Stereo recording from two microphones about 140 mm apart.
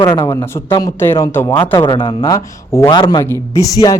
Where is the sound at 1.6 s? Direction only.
35° left (ahead or behind).